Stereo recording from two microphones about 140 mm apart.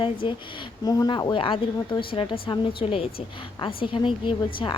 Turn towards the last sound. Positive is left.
turn(degrees=35)  # may be behind; listen again after turning